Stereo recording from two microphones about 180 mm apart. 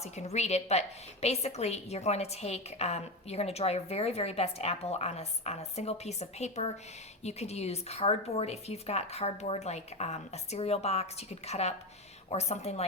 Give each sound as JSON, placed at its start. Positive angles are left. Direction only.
{"t": 0.0, "sound": "a woman's voice", "side_deg": 40}